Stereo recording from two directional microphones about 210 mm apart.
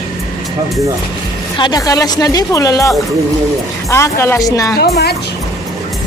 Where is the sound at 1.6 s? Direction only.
20° left (ahead or behind).